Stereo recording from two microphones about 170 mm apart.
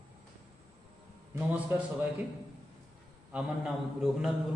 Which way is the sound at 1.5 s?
10° right (ahead or behind).